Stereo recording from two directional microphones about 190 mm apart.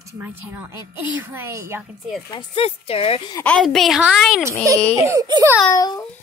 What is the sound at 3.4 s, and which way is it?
A woman's voice, 5° left (ahead or behind).